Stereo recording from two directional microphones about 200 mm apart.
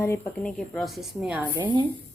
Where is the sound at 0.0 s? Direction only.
10° left (ahead or behind); by 1.6 s 5° right (ahead or behind).